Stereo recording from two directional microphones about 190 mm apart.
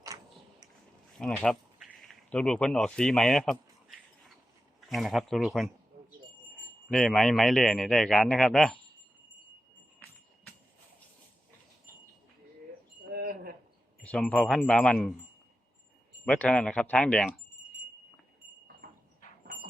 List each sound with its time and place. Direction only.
1.2 s speech: 5° left (ahead or behind)
4.9 s speech: centre (ahead or behind)
6.9 s speech: centre (ahead or behind)
13.1 s a sound: 50° right (ahead or behind)
14.0 s speech: 5° left (ahead or behind)
16.2 s speech: 5° left (ahead or behind)
18.8 s a sound: 55° right (ahead or behind)